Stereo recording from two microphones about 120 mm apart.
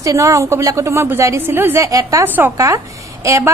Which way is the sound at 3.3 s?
25° right (ahead or behind).